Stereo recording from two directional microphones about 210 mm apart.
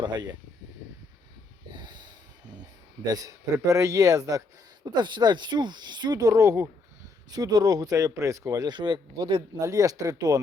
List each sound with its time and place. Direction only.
0.0 s speech: 20° right (ahead or behind)
1.7 s snort: 20° right (ahead or behind)
2.5 s speech: 20° right (ahead or behind)